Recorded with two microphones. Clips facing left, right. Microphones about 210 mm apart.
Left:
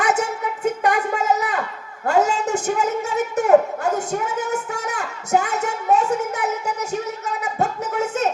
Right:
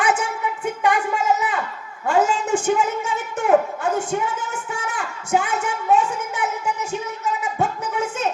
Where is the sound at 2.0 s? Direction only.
40° left (ahead or behind).